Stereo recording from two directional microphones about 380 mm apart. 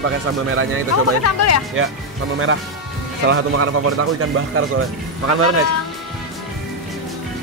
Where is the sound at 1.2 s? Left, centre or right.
Left.